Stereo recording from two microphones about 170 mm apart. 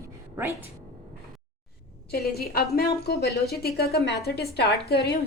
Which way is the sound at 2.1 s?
65° left (ahead or behind).